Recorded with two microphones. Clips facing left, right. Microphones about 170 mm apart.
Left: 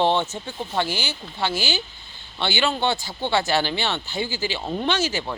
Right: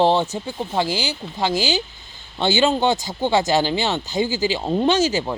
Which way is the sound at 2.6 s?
20° right (ahead or behind).